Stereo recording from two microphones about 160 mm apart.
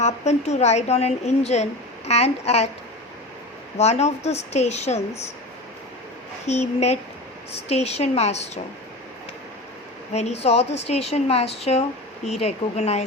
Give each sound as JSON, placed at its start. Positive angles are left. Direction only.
{"t": 0.0, "sound": "a woman's voice", "side_deg": 45}
{"t": 3.8, "sound": "a woman's voice", "side_deg": 40}
{"t": 6.4, "sound": "a woman's voice", "side_deg": 45}
{"t": 10.1, "sound": "a woman's voice", "side_deg": 45}